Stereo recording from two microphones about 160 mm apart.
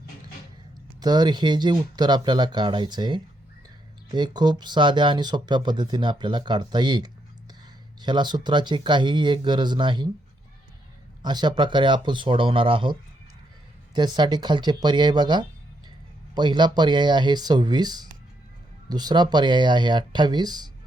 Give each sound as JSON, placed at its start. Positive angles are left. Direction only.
{"t": 0.9, "sound": "speech", "side_deg": -25}
{"t": 11.2, "sound": "speech", "side_deg": -25}